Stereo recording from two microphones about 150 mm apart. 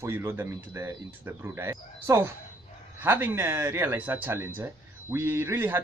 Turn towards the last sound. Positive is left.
turn(degrees=-15)  # may be behind; listen again after turning